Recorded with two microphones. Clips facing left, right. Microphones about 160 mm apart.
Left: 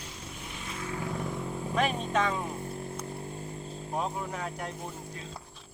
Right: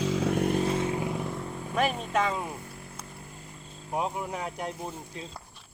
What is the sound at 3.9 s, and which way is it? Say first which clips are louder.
Speech: right 3 dB; 15° right (ahead or behind).